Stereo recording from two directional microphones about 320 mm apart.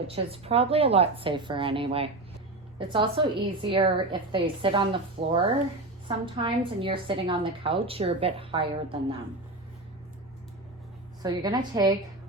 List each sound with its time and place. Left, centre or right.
0.1 s a woman's voice: centre
11.2 s a woman's voice: centre